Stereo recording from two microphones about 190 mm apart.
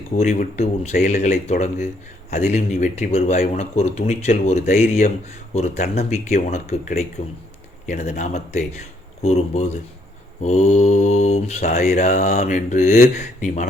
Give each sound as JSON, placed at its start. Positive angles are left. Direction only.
{"t": 0.2, "sound": "mantra", "side_deg": 40}